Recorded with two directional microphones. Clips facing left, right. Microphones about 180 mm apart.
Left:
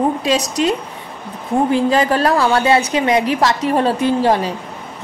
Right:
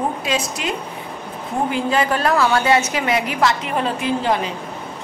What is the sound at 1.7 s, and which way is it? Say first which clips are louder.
A woman's voice: left 4 dB; 35° left (ahead or behind).